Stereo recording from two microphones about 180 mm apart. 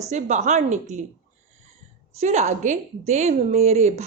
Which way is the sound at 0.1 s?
40° right (ahead or behind).